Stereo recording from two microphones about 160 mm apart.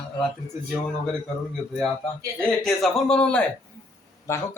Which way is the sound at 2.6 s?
5° left (ahead or behind).